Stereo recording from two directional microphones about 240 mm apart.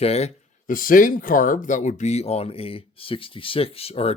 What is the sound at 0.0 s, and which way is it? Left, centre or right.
Speech, left.